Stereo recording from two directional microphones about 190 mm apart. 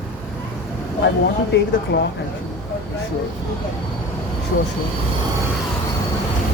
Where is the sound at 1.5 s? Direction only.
70° left (ahead or behind).